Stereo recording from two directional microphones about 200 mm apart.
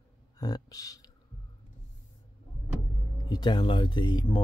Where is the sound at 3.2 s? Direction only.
20° left (ahead or behind).